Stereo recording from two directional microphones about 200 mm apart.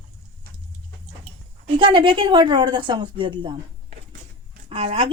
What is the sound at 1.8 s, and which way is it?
A woman's voice, 25° right (ahead or behind).